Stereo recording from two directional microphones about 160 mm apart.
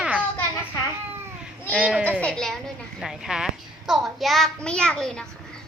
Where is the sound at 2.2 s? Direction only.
5° left (ahead or behind).